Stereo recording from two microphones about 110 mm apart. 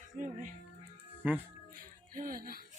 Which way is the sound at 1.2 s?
15° right (ahead or behind).